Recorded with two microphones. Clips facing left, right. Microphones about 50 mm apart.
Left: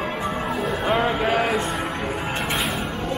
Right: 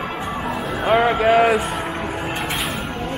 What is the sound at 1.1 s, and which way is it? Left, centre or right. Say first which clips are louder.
Speech: right 6 dB; centre.